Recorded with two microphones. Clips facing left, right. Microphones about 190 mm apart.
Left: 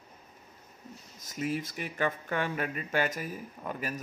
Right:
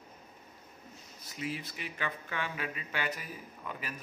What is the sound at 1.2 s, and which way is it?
Speech, 45° left (ahead or behind).